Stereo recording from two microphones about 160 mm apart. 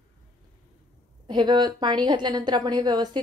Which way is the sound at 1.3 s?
25° right (ahead or behind).